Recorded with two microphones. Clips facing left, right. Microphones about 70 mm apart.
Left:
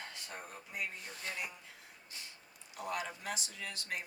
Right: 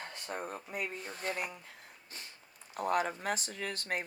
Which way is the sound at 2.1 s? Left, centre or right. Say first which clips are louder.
Right 2 dB; right.